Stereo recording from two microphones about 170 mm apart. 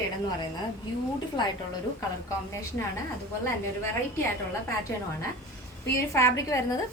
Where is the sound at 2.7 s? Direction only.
15° left (ahead or behind).